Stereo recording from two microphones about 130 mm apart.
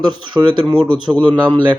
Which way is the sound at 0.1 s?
35° right (ahead or behind).